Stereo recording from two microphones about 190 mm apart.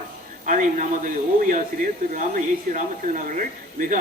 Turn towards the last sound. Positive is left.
turn(degrees=-45)  # may be behind; listen again after turning